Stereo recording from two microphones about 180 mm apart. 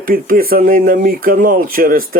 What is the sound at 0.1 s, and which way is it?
Speech, 55° right (ahead or behind).